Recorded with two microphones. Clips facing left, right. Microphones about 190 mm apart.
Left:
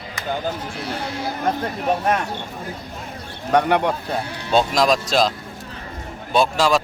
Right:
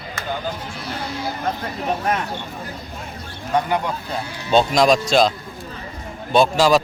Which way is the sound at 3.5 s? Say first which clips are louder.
Left 3 dB; 65° left (ahead or behind).